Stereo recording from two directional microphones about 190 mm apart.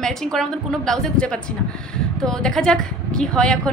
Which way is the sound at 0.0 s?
5° left (ahead or behind).